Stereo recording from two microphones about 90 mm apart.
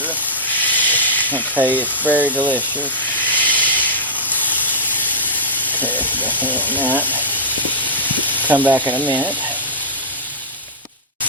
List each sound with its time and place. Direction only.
0.5 s hiss: 20° left (ahead or behind)
1.5 s speech: 20° right (ahead or behind)
3.2 s hiss: 20° left (ahead or behind)
6.3 s speech: 20° right (ahead or behind)
6.6 s speech: 20° left (ahead or behind)
6.8 s speech: 20° right (ahead or behind)
7.9 s vehicle: 20° right (ahead or behind)
8.3 s sizzle: 20° right (ahead or behind)